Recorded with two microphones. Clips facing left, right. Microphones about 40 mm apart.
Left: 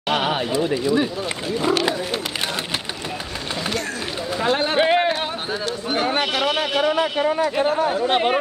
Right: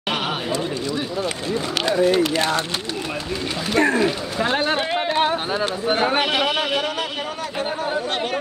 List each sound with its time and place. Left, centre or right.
0.1 s a sound: centre
1.6 s speech: centre
3.7 s speech: right
4.4 s a man's voice: centre
4.7 s a sound: left
5.5 s a man's voice: centre
6.9 s a man's voice: left